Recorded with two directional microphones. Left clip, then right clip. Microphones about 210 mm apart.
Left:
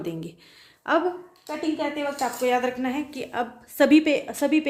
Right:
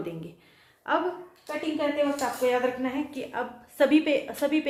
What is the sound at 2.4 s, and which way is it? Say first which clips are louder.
A woman's voice: left 2 dB; 55° left (ahead or behind).